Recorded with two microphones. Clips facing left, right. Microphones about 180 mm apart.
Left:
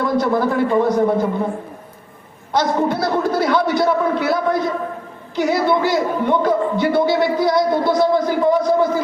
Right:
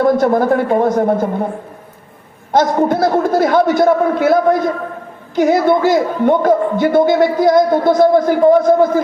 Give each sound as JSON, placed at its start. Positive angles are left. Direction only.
{"t": 0.0, "sound": "a man's voice", "side_deg": -50}
{"t": 2.5, "sound": "a man's voice", "side_deg": -50}